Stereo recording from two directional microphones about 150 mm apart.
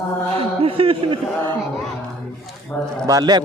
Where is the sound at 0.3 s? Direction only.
40° right (ahead or behind).